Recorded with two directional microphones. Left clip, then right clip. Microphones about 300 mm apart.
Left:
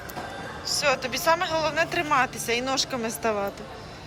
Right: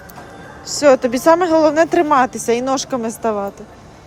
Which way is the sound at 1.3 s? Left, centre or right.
Right.